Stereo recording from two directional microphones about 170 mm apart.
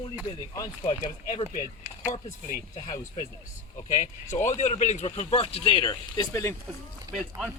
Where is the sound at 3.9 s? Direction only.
45° left (ahead or behind); by 6.6 s 15° left (ahead or behind).